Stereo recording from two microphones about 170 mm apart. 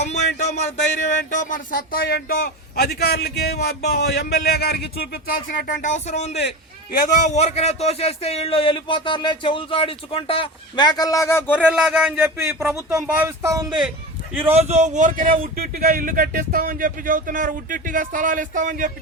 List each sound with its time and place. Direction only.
0.0 s a sound: 40° left (ahead or behind)
1.3 s a man's voice: 50° left (ahead or behind); by 11.6 s 15° left (ahead or behind)
11.7 s speech: centre (ahead or behind)
13.0 s speech: 10° right (ahead or behind)
14.7 s speech: 45° right (ahead or behind)